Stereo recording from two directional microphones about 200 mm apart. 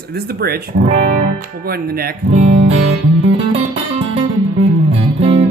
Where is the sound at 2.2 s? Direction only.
30° right (ahead or behind).